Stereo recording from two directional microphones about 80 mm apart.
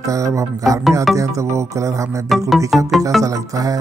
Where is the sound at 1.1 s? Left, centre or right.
Right.